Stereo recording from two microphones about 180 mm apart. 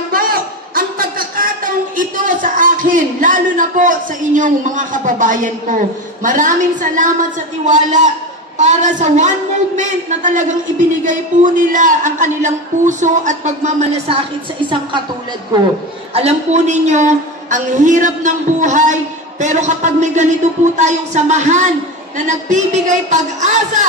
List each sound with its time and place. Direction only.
0.1 s a sound: 50° right (ahead or behind)
6.2 s speech: 45° right (ahead or behind)
16.1 s speech: 35° right (ahead or behind)